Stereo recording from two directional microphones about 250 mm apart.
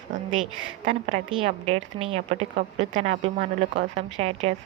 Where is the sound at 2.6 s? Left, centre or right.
Right.